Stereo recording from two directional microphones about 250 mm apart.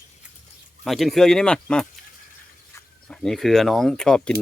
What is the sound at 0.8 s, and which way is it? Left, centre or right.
Speech, centre.